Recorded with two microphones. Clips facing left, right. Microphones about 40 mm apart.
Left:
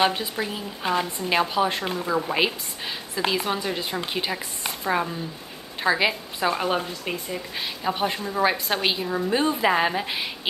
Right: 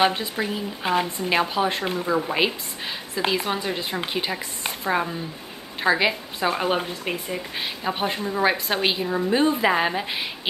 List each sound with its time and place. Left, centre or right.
0.0 s a woman's voice: centre
0.4 s a woman's voice: centre